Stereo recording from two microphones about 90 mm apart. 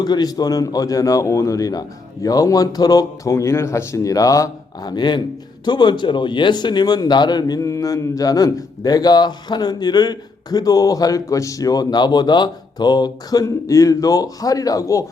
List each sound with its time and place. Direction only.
0.0 s a man's voice: 50° left (ahead or behind)